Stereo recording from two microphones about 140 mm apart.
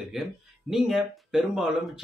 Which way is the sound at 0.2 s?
Centre (ahead or behind).